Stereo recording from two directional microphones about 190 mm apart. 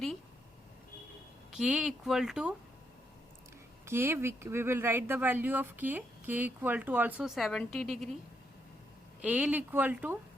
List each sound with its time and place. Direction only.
1.5 s speech: 5° right (ahead or behind)
3.8 s speech: 10° right (ahead or behind)
9.2 s speech: 5° right (ahead or behind)